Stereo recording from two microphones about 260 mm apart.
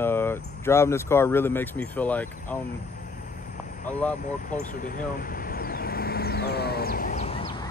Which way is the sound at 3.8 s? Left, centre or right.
Left.